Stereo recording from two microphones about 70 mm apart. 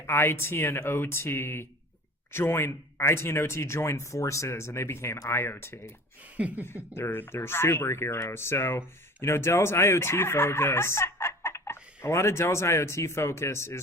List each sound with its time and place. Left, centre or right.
0.0 s speech: left
6.2 s a sound: right
6.9 s speech: left